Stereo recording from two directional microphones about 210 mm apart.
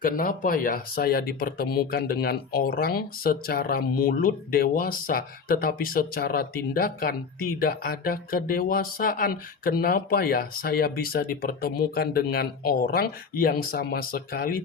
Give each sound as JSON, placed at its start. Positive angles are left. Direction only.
{"t": 0.0, "sound": "speech", "side_deg": 40}